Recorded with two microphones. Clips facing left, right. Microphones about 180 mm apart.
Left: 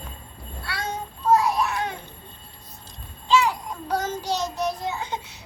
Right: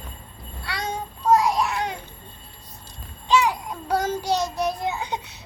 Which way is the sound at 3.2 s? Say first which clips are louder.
Even; 15° right (ahead or behind).